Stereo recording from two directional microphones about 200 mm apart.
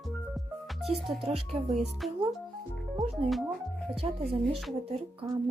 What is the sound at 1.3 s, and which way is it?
Speech, 30° right (ahead or behind).